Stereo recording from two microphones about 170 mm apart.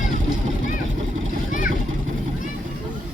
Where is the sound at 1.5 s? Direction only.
50° left (ahead or behind).